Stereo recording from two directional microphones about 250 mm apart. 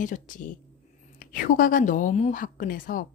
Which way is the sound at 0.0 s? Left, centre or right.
Left.